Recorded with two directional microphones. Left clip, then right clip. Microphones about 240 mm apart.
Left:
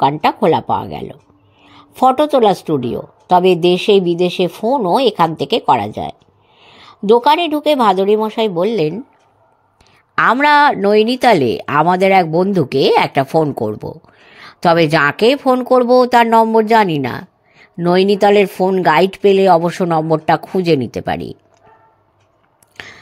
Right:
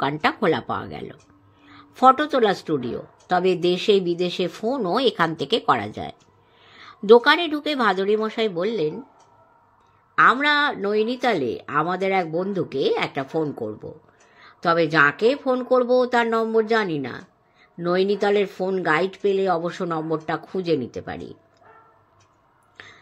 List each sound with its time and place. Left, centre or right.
0.0 s a woman's voice: centre
8.7 s speech: left
10.1 s speech: left
22.8 s whispering: left